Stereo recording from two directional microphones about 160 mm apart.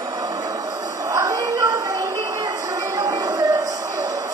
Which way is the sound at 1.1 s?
20° right (ahead or behind).